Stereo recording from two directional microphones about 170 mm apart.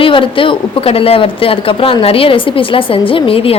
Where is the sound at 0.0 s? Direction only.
30° left (ahead or behind).